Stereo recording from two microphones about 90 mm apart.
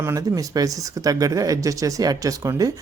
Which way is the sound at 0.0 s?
35° right (ahead or behind).